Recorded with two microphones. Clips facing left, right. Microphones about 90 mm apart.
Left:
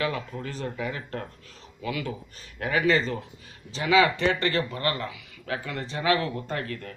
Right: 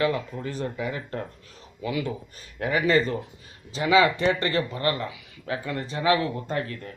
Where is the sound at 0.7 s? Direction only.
25° right (ahead or behind).